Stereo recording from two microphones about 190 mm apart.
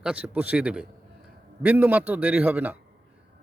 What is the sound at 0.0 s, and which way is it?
A man's voice, 5° right (ahead or behind).